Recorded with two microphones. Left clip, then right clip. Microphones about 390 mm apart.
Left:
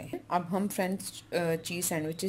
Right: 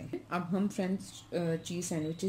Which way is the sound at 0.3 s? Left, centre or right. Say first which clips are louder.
Left 5 dB; centre.